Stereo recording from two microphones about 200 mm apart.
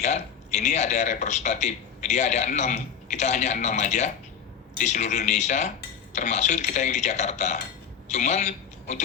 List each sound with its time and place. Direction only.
0.5 s a man's voice: 35° left (ahead or behind)